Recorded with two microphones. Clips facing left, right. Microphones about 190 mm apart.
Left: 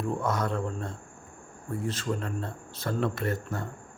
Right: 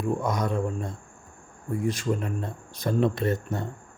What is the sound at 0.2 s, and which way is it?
Speech, 15° right (ahead or behind).